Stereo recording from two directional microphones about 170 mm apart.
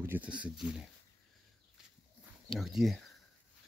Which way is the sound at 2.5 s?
Centre (ahead or behind).